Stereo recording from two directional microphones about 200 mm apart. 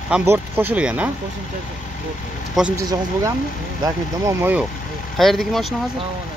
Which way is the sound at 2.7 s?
15° right (ahead or behind).